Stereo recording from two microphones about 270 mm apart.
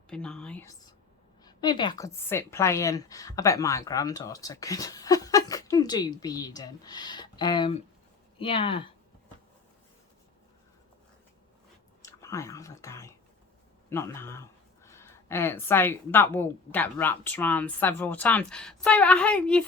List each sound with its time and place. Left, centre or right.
0.1 s a woman's voice: centre
12.0 s a woman's voice: centre